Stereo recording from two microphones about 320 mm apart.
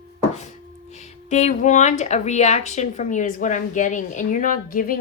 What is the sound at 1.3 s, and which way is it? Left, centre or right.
Speech, left.